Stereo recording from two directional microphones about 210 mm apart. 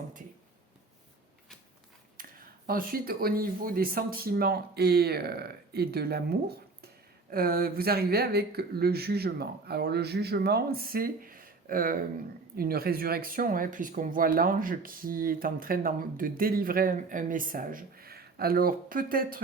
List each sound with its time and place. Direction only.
2.1 s speech: 40° right (ahead or behind)